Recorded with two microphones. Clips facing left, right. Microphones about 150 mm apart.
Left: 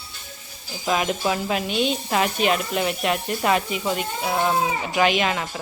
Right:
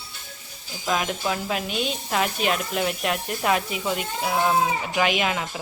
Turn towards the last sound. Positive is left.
turn(degrees=-5)  # may be behind; listen again after turning